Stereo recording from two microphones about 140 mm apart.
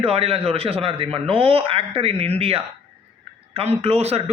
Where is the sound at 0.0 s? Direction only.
45° right (ahead or behind).